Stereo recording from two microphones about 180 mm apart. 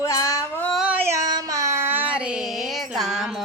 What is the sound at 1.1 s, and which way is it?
Child singing, 20° right (ahead or behind).